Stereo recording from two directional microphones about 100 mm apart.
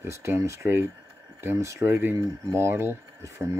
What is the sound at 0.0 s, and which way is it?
Speech, 30° right (ahead or behind).